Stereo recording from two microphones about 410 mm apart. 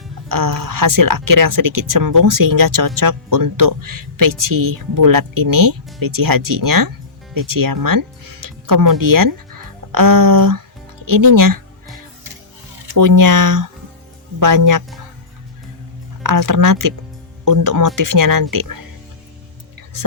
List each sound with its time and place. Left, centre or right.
0.3 s speech: right
12.9 s speech: right
16.2 s speech: right